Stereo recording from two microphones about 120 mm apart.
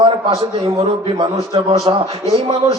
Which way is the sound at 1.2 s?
45° right (ahead or behind).